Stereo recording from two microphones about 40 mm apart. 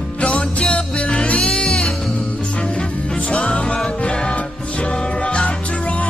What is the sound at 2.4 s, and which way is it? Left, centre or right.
Music, left.